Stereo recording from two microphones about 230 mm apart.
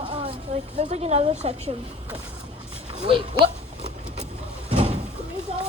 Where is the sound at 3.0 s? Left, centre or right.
Right.